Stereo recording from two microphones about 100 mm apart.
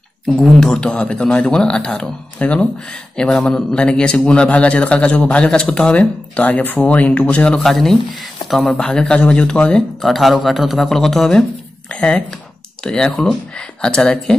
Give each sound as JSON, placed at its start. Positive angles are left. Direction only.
{"t": 0.3, "sound": "speech", "side_deg": 5}